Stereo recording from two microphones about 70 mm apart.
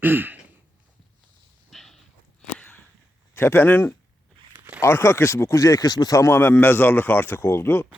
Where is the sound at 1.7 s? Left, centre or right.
Centre.